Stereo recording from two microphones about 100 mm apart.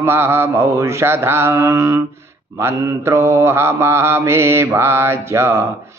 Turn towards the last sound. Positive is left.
turn(degrees=-25)  # may be behind; listen again after turning